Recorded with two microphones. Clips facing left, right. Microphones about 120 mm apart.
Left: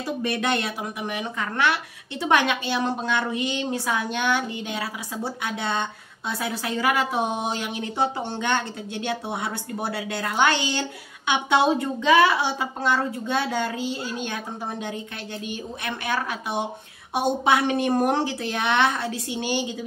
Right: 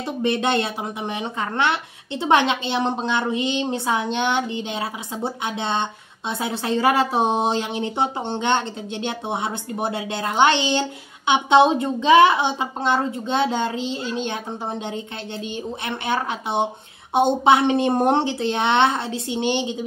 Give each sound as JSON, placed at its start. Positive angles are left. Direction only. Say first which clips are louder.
{"t": 0.0, "sound": "speech", "louder": "right 4 dB", "side_deg": -25}
{"t": 17.1, "sound": "speech", "louder": "right 5 dB", "side_deg": -25}